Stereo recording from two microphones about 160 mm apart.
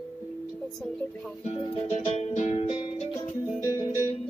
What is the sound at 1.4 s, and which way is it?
Music, 40° left (ahead or behind).